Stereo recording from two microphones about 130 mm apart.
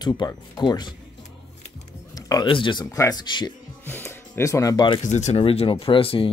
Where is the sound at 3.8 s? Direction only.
15° left (ahead or behind).